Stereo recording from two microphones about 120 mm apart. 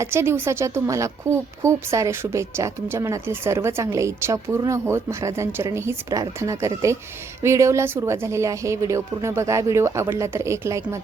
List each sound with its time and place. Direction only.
0.0 s a woman's voice: 20° right (ahead or behind)